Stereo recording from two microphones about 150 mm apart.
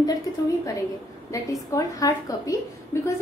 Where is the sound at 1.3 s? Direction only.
20° left (ahead or behind).